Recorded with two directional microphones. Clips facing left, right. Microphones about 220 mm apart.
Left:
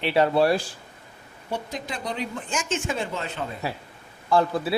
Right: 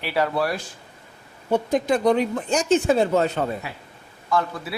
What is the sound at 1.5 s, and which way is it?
Speech, 50° right (ahead or behind).